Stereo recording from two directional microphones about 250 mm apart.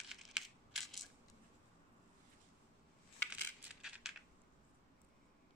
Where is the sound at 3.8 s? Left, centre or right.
Centre.